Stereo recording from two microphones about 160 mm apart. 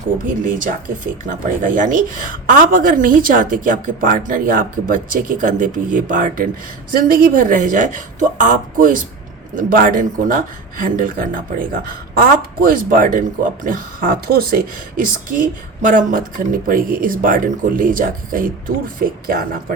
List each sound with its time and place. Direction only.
0.4 s speech: 55° right (ahead or behind)